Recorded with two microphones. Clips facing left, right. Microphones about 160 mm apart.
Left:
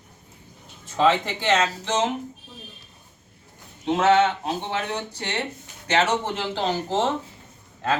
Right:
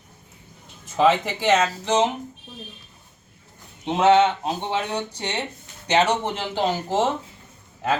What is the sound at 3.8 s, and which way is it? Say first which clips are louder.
A man's voice: right 2 dB; 20° right (ahead or behind).